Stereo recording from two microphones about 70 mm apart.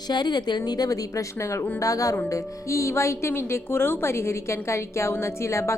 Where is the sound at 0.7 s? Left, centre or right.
Left.